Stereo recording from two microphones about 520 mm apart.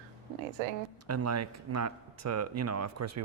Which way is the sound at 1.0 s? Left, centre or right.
Right.